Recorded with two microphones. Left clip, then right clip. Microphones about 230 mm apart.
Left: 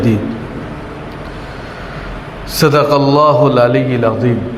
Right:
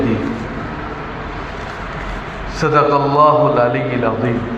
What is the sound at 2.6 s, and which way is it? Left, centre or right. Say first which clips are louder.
A man's voice: left 3 dB; left.